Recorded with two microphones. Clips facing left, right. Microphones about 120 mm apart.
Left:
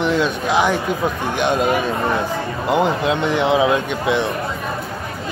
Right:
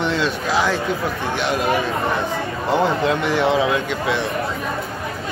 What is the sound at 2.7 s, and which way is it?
A man's voice, 15° left (ahead or behind).